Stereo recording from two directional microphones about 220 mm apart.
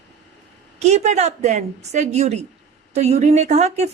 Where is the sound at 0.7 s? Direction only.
30° right (ahead or behind).